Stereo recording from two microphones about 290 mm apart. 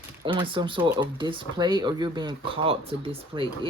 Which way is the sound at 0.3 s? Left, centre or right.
Centre.